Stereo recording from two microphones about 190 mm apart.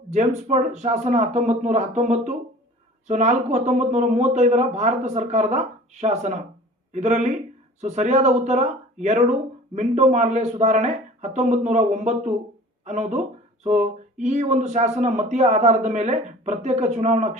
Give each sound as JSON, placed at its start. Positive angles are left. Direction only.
{"t": 0.1, "sound": "speech", "side_deg": -35}